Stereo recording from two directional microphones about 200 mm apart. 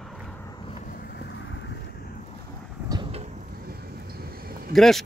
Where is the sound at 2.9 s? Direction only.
25° right (ahead or behind).